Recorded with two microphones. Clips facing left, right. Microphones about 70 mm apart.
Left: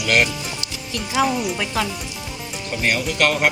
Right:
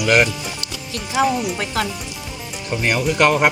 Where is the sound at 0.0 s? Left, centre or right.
Centre.